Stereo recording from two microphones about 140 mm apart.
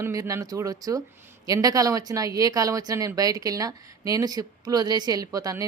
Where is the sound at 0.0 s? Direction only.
25° right (ahead or behind).